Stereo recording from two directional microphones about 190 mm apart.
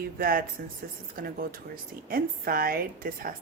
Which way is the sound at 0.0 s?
50° right (ahead or behind).